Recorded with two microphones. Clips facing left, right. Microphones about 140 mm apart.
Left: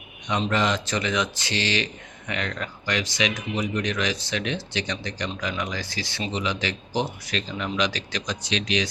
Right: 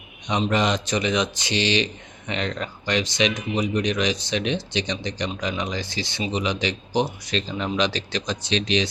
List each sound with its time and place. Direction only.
0.5 s speech: 20° right (ahead or behind)
7.3 s speech: 30° right (ahead or behind)